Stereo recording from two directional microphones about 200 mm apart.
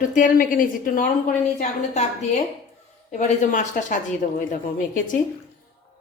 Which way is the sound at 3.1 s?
40° left (ahead or behind).